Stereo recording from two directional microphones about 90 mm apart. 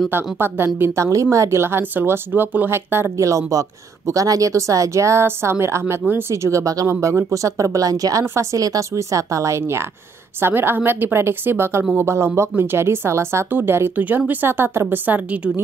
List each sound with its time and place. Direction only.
0.4 s speech: 25° right (ahead or behind)